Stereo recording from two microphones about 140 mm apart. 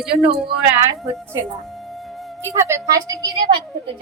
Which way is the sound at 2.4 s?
20° right (ahead or behind).